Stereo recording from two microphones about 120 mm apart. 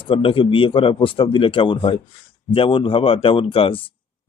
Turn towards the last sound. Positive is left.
turn(degrees=50)  # may be behind; listen again after turning